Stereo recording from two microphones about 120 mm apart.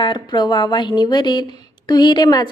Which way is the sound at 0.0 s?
40° left (ahead or behind).